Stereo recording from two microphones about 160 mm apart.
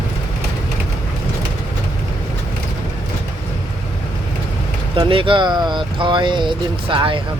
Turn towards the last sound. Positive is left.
turn(degrees=-30)  # may be behind; listen again after turning